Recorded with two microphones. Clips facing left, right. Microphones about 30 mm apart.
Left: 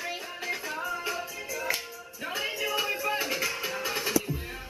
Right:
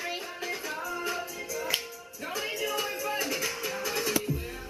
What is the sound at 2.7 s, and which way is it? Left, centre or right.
Music, centre.